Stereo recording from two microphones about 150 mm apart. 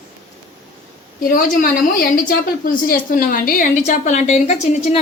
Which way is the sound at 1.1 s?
65° left (ahead or behind).